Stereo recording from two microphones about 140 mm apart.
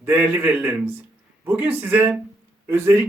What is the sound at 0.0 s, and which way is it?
A man's voice, 10° right (ahead or behind).